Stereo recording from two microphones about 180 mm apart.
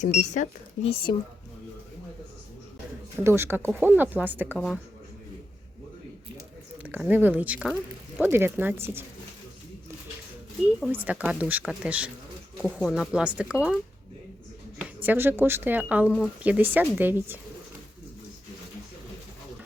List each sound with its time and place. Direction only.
0.0 s speech: 40° left (ahead or behind)
3.2 s speech: 15° right (ahead or behind)
6.8 s speech: 10° right (ahead or behind)
10.8 s speech: 5° right (ahead or behind)
15.0 s speech: 10° right (ahead or behind)